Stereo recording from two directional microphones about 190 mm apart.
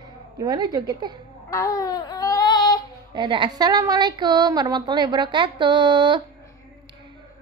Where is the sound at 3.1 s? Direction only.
25° right (ahead or behind).